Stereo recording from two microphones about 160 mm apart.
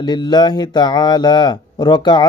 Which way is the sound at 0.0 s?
25° left (ahead or behind).